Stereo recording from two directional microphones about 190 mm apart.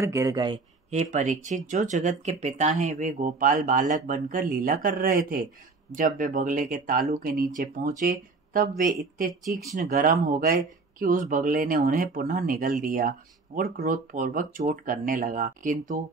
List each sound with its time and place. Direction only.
0.0 s speech: 15° right (ahead or behind)
0.8 s speech: 40° right (ahead or behind)
9.3 s speech: centre (ahead or behind)
9.8 s speech: 45° right (ahead or behind)